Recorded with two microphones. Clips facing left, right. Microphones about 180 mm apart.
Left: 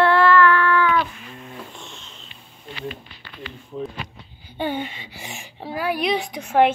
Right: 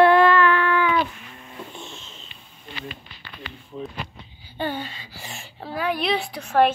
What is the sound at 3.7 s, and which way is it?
A woman's voice, 15° left (ahead or behind).